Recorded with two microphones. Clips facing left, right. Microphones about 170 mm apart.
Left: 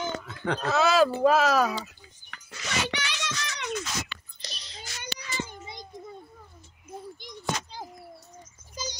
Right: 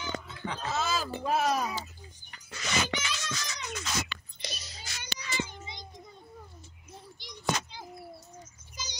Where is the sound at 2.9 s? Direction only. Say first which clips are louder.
Left 2 dB; 75° left (ahead or behind).